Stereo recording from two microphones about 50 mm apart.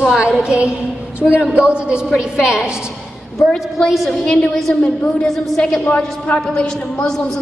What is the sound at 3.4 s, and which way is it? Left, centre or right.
A woman's voice, centre.